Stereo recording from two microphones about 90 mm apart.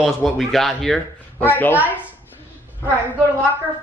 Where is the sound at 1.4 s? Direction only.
20° left (ahead or behind).